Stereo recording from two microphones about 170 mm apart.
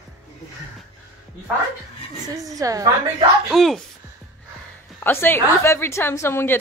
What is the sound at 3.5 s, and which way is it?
Speech, centre (ahead or behind).